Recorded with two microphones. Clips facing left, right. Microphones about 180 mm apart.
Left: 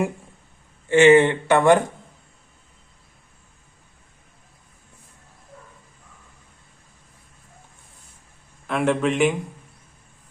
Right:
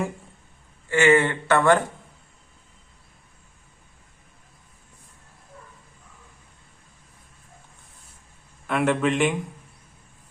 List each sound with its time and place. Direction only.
0.9 s speech: 20° left (ahead or behind)
8.6 s a man's voice: centre (ahead or behind)